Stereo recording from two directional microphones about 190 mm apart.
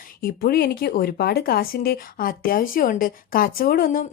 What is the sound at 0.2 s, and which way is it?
A woman's voice, 50° left (ahead or behind).